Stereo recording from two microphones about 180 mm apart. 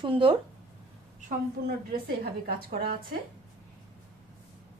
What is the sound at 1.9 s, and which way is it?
A woman's voice, 55° right (ahead or behind).